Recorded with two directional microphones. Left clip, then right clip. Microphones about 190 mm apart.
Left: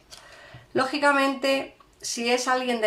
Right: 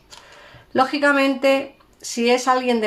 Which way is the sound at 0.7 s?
35° right (ahead or behind).